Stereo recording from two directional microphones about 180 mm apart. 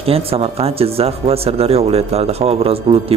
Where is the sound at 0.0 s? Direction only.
30° right (ahead or behind).